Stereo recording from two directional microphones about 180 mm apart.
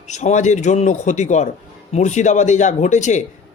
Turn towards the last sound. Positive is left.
turn(degrees=40)  # may be behind; listen again after turning